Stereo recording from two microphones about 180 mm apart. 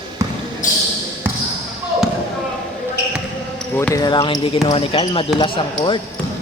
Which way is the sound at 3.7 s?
10° left (ahead or behind).